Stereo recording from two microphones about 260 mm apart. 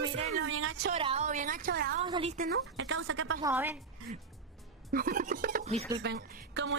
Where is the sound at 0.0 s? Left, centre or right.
Right.